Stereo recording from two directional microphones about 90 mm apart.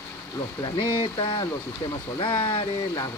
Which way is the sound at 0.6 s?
65° left (ahead or behind).